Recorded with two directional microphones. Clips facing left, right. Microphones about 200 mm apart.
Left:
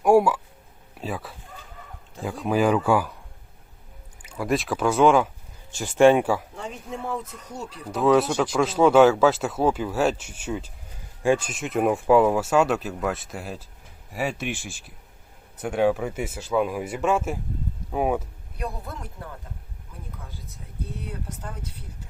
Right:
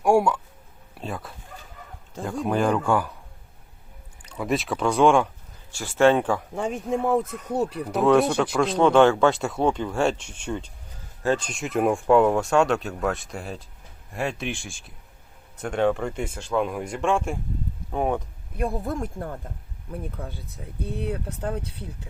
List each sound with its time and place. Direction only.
0.0 s a sound: centre (ahead or behind)
0.9 s speech: 5° left (ahead or behind)
4.2 s speech: 5° left (ahead or behind)
5.7 s speech: 20° left (ahead or behind)
6.6 s speech: 50° right (ahead or behind)
7.9 s speech: centre (ahead or behind)
18.5 s speech: 50° right (ahead or behind)
19.9 s speech: 60° right (ahead or behind)